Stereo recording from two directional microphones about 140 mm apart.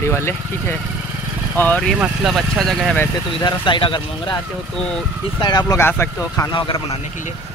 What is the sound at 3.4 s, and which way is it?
Speech, 35° left (ahead or behind).